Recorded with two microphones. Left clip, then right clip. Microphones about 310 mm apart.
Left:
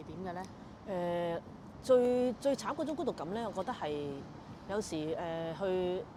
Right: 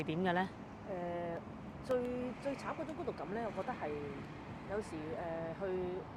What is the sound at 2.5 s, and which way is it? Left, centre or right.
Speech, left.